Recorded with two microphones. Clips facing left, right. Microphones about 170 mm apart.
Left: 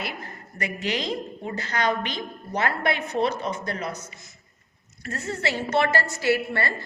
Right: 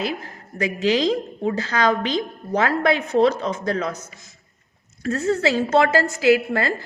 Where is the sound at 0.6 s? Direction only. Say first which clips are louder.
Right 9 dB; 90° right.